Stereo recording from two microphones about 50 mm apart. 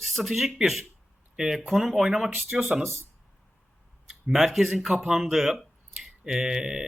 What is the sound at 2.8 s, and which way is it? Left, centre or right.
Speech, right.